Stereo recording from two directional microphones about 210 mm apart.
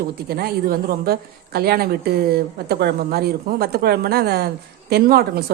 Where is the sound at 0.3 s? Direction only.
45° right (ahead or behind).